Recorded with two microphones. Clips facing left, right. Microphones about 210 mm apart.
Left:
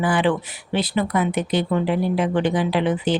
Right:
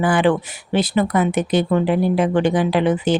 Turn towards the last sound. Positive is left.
turn(degrees=-45)  # may be behind; listen again after turning